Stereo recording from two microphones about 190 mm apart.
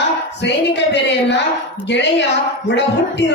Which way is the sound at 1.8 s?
65° left (ahead or behind).